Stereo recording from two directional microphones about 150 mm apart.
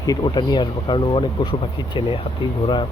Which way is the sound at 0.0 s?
25° left (ahead or behind).